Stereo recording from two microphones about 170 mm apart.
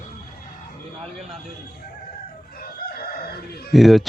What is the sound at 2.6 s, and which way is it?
Crowing, 60° left (ahead or behind).